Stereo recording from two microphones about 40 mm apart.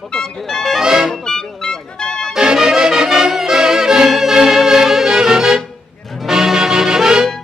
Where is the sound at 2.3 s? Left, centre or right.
Centre.